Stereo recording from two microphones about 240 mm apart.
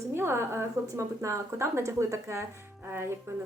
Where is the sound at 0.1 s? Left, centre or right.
Centre.